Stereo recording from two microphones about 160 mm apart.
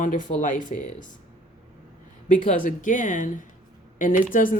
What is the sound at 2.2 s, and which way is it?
Speech, 55° left (ahead or behind).